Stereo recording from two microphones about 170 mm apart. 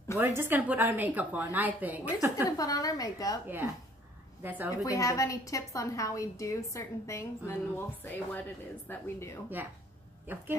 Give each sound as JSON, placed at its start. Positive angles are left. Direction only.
{"t": 0.2, "sound": "a woman's voice", "side_deg": -15}
{"t": 2.5, "sound": "a woman's voice", "side_deg": 20}
{"t": 3.4, "sound": "a woman's voice", "side_deg": -10}
{"t": 4.6, "sound": "a woman's voice", "side_deg": 20}